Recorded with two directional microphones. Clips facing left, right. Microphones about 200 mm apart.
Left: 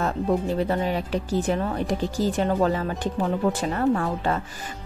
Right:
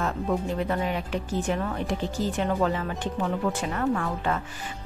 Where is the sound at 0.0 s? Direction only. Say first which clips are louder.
Left 3 dB; 35° left (ahead or behind).